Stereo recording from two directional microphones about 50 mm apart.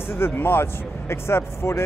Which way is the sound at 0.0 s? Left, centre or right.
Left.